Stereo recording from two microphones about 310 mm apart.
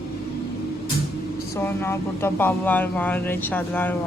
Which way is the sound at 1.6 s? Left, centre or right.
Centre.